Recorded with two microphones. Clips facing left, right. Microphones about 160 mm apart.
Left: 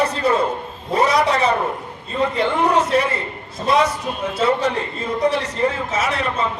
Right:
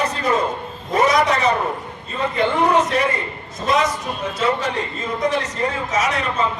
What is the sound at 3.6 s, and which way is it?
A man's voice, 30° left (ahead or behind).